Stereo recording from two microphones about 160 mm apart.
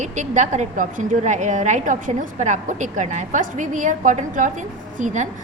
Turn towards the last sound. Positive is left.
turn(degrees=-50)  # may be behind; listen again after turning